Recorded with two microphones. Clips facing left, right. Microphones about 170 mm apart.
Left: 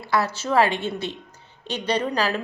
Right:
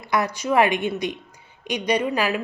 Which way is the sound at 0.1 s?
15° right (ahead or behind).